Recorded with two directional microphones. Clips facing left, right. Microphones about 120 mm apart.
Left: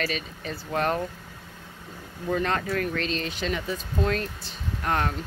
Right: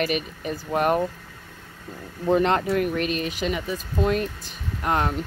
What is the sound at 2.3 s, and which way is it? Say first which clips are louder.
Speech: right 6 dB; 25° right (ahead or behind).